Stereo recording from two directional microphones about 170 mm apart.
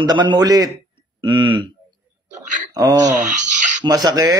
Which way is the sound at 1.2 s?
30° right (ahead or behind).